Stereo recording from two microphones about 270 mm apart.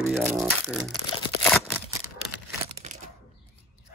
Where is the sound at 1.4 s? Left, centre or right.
Centre.